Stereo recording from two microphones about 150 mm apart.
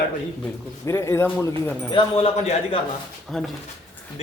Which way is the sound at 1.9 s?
35° left (ahead or behind).